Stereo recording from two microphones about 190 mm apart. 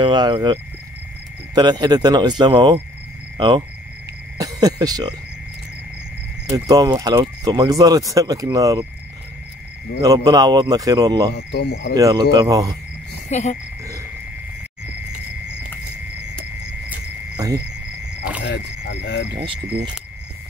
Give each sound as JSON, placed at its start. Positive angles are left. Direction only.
{"t": 0.0, "sound": "speech", "side_deg": -25}
{"t": 6.5, "sound": "speech", "side_deg": -20}
{"t": 10.0, "sound": "speech", "side_deg": -20}
{"t": 11.3, "sound": "speech", "side_deg": 55}
{"t": 11.9, "sound": "speech", "side_deg": -20}
{"t": 13.3, "sound": "frog", "side_deg": 35}
{"t": 18.4, "sound": "speech", "side_deg": 65}